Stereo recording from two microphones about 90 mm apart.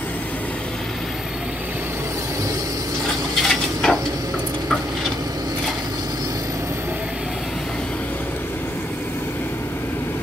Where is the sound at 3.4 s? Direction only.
5° left (ahead or behind).